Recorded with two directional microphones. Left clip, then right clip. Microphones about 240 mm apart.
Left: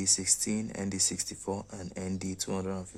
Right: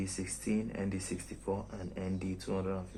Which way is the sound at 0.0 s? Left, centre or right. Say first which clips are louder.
Left 10 dB; left.